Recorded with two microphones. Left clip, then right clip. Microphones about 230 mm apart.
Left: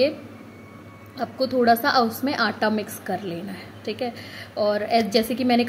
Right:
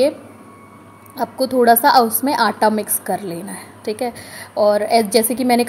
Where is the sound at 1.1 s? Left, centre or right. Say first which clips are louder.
Right 5 dB; centre.